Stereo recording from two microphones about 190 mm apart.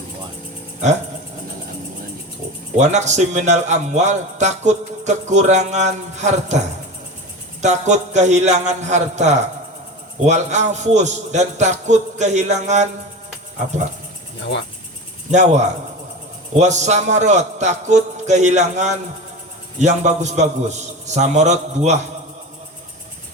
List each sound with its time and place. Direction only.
2.7 s a man's voice: 40° right (ahead or behind)
7.6 s a man's voice: 40° right (ahead or behind)
15.3 s a man's voice: 40° right (ahead or behind)